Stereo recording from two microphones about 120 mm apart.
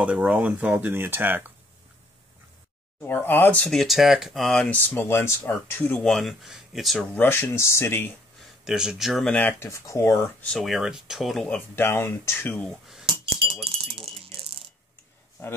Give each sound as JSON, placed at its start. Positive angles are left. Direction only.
{"t": 0.0, "sound": "speech", "side_deg": -10}
{"t": 3.1, "sound": "speech", "side_deg": 15}
{"t": 3.7, "sound": "speech", "side_deg": 0}
{"t": 4.7, "sound": "speech", "side_deg": 15}
{"t": 6.0, "sound": "speech", "side_deg": 0}
{"t": 7.2, "sound": "speech", "side_deg": 15}
{"t": 8.6, "sound": "speech", "side_deg": -5}
{"t": 9.2, "sound": "speech", "side_deg": 10}
{"t": 10.4, "sound": "speech", "side_deg": 5}
{"t": 11.4, "sound": "speech", "side_deg": 15}
{"t": 14.1, "sound": "a sound", "side_deg": -50}